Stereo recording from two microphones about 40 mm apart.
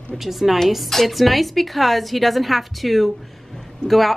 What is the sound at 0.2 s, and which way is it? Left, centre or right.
A woman's voice, centre.